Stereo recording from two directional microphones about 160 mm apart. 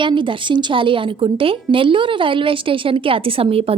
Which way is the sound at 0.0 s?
30° right (ahead or behind).